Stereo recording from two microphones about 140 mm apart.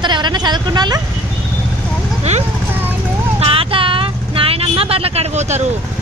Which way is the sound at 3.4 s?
40° right (ahead or behind).